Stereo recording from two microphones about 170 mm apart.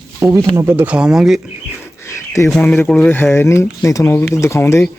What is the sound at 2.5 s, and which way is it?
Speech, 10° left (ahead or behind).